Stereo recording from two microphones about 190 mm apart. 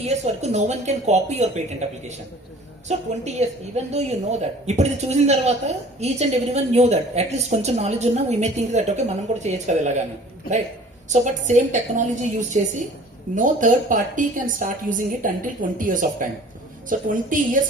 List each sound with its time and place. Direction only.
0.0 s speech: 35° right (ahead or behind)
2.9 s speech: 35° right (ahead or behind)
11.1 s speech: 40° right (ahead or behind)
13.3 s a woman's voice: 40° right (ahead or behind)